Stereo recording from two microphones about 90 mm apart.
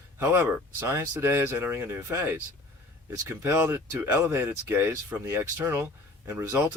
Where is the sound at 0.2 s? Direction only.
30° right (ahead or behind).